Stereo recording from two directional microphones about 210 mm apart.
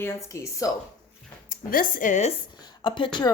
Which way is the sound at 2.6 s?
20° left (ahead or behind).